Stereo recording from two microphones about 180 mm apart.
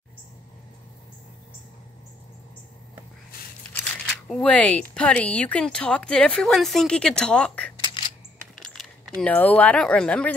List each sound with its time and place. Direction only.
4.3 s speech: 5° left (ahead or behind)
7.7 s coin: 25° left (ahead or behind)
8.5 s speech: centre (ahead or behind)